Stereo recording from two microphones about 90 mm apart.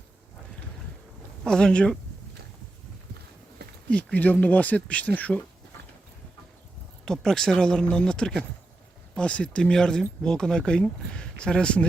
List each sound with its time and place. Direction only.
1.5 s speech: 10° left (ahead or behind)
3.8 s speech: 15° left (ahead or behind)
7.0 s speech: 5° left (ahead or behind)